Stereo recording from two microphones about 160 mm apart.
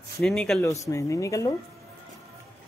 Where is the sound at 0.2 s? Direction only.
5° left (ahead or behind).